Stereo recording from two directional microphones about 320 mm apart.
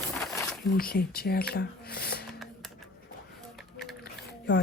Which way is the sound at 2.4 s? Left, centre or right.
Centre.